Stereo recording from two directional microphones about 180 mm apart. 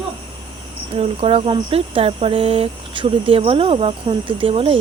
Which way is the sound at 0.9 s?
35° right (ahead or behind).